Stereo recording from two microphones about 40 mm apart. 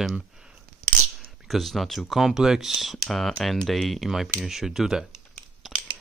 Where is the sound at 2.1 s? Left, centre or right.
Centre.